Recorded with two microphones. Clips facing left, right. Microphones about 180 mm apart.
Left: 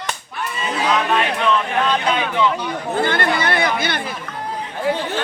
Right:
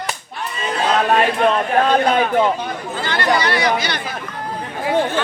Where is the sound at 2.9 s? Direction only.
55° left (ahead or behind).